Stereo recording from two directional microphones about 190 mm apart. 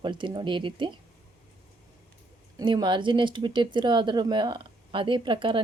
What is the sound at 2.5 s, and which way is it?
Speech, 25° right (ahead or behind).